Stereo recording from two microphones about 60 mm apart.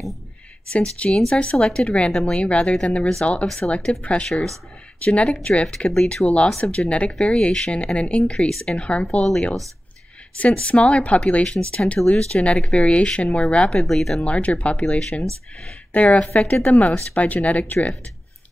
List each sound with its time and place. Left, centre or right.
0.7 s speech: left
13.8 s speech: centre
14.2 s speech: left